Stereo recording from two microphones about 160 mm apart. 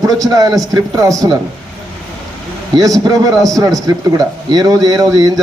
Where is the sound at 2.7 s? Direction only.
20° right (ahead or behind).